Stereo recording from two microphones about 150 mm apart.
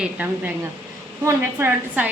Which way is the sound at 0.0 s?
10° right (ahead or behind).